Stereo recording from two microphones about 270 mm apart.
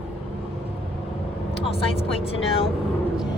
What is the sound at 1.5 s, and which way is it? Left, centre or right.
Speech, left.